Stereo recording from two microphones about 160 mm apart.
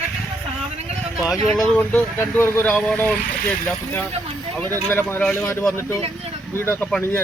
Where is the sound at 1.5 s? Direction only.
5° left (ahead or behind).